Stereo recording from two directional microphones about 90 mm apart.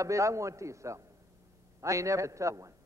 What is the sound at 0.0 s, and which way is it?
A man's voice, 35° right (ahead or behind).